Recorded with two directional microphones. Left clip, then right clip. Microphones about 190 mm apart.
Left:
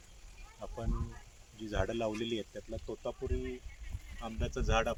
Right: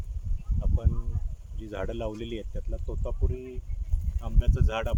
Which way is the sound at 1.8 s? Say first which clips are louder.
Right 2 dB; 15° right (ahead or behind).